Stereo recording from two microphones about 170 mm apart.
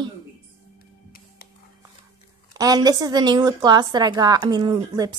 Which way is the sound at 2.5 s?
20° right (ahead or behind).